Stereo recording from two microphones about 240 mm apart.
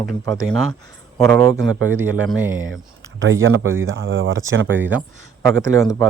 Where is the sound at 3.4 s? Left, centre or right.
Right.